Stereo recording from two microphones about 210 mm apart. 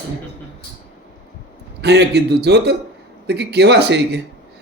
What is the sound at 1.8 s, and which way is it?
Speech, 55° right (ahead or behind).